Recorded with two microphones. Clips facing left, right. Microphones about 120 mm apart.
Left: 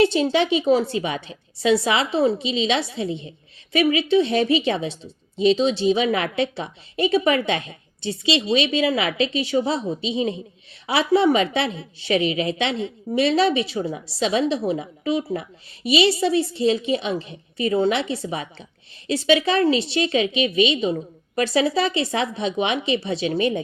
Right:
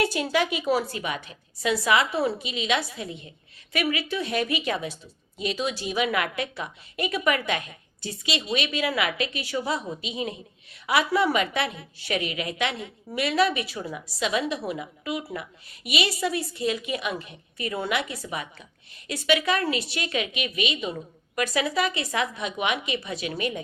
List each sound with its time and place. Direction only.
0.0 s a woman's voice: 25° left (ahead or behind)